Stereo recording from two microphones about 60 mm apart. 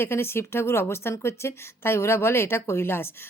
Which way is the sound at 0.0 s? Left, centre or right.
Left.